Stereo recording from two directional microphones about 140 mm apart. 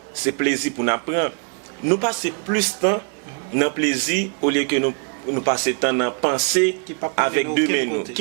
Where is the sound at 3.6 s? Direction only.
10° right (ahead or behind).